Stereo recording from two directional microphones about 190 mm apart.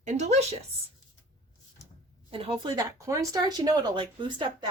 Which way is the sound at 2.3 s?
30° right (ahead or behind).